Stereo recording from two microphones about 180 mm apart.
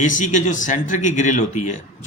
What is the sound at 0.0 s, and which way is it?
Speech, 45° left (ahead or behind).